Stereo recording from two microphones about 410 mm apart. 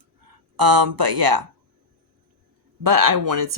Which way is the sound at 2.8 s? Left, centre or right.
Right.